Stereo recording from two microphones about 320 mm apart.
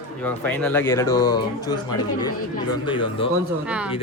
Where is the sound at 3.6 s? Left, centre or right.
Centre.